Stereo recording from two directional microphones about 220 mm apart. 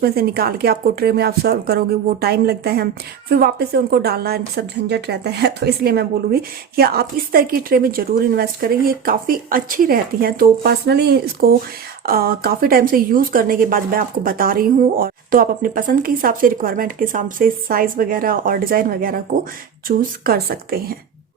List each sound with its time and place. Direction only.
0.0 s a woman's voice: 45° right (ahead or behind)